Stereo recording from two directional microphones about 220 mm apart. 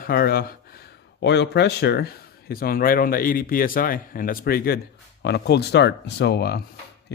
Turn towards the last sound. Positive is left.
turn(degrees=50)  # may be behind; listen again after turning